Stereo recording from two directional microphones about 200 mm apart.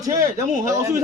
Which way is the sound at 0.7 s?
15° right (ahead or behind).